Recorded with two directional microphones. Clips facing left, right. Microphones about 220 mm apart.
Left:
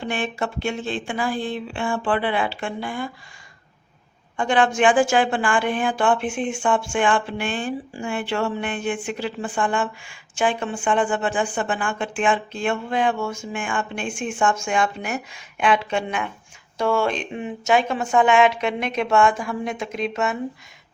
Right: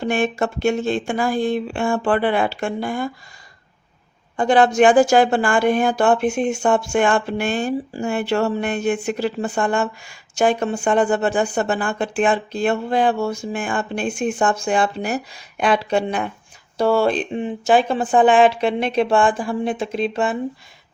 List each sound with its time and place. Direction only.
0.0 s speech: 45° right (ahead or behind)
4.4 s a woman's voice: 40° right (ahead or behind)